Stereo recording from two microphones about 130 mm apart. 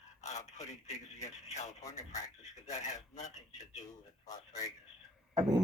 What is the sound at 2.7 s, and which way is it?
Speech, 70° left (ahead or behind).